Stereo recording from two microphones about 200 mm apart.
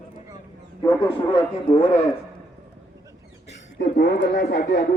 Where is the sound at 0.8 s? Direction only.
15° left (ahead or behind).